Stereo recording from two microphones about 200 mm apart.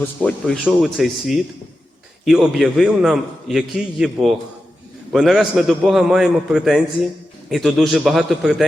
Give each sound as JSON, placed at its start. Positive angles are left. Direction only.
{"t": 0.3, "sound": "a man's voice", "side_deg": 5}